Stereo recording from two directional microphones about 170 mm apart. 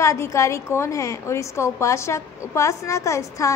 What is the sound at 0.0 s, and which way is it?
A woman's voice, 15° left (ahead or behind).